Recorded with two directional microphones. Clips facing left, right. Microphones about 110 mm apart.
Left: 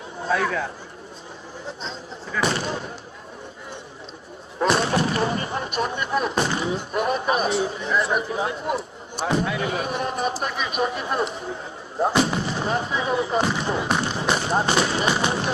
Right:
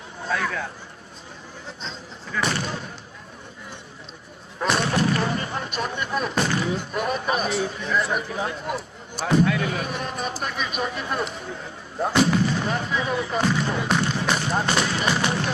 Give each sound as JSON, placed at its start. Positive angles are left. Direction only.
{"t": 0.2, "sound": "speech", "side_deg": 25}
{"t": 2.3, "sound": "speech", "side_deg": 25}
{"t": 4.6, "sound": "speech", "side_deg": 25}
{"t": 13.9, "sound": "music", "side_deg": 25}